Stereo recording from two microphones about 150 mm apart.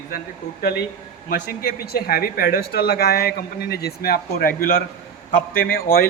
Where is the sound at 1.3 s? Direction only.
85° left.